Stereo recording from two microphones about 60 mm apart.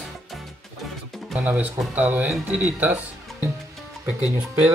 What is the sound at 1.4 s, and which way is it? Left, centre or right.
Speech, right.